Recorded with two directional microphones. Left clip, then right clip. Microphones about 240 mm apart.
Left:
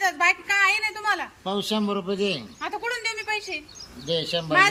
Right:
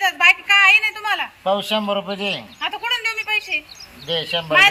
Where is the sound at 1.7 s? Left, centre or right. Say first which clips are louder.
Right 5 dB; centre.